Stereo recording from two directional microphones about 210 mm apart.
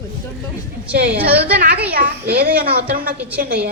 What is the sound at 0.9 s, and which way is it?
A woman's voice, 50° right (ahead or behind).